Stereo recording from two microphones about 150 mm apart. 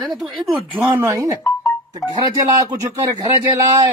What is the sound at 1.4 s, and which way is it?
Music, 20° left (ahead or behind).